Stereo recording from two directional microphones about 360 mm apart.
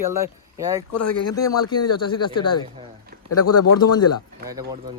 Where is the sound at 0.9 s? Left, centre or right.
Left.